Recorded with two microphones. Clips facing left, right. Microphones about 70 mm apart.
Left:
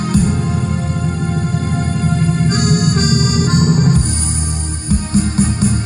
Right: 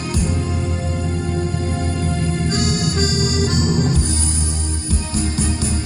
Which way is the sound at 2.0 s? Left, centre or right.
Left.